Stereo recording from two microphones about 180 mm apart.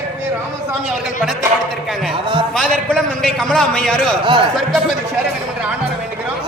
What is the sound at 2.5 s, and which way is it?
A man's voice, 5° left (ahead or behind).